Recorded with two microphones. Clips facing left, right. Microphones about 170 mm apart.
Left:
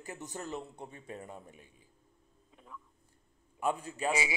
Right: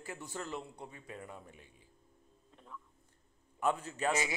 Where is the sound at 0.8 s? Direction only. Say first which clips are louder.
Left 2 dB; 30° left (ahead or behind).